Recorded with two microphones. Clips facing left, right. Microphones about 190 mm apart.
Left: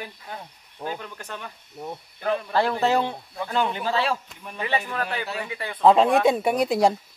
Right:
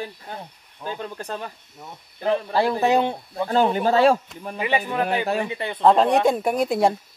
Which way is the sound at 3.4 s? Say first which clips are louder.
Right 6 dB; 40° right (ahead or behind).